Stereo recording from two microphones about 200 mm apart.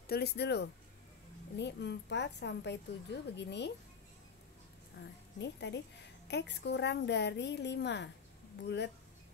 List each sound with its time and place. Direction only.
0.0 s a woman's voice: 50° left (ahead or behind)
5.4 s a woman's voice: 60° left (ahead or behind)